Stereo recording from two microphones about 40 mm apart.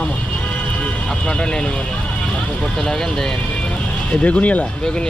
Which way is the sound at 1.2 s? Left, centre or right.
Left.